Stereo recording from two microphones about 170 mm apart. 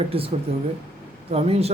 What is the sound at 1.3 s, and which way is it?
Speech, 35° right (ahead or behind).